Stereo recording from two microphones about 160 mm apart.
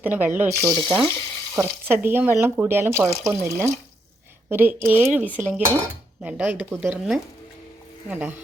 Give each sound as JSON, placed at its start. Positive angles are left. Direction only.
{"t": 0.0, "sound": "speech", "side_deg": -10}
{"t": 0.8, "sound": "speech", "side_deg": -30}
{"t": 1.5, "sound": "speech", "side_deg": -15}